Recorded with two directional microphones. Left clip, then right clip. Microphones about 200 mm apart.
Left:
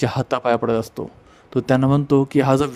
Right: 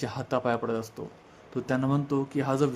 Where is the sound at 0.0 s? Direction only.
40° left (ahead or behind).